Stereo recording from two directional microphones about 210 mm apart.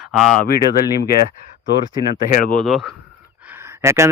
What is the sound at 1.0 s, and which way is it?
Speech, 45° left (ahead or behind).